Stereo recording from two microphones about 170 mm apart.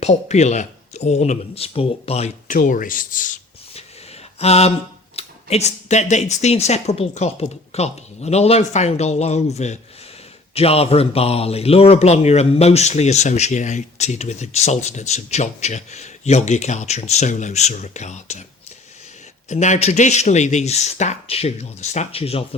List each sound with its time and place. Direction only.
0.0 s a man's voice: 40° left (ahead or behind)
2.5 s speech: 50° left (ahead or behind)
4.4 s a sound: 40° left (ahead or behind)
5.1 s a man's voice: 40° left (ahead or behind)
19.5 s a man's voice: 45° left (ahead or behind)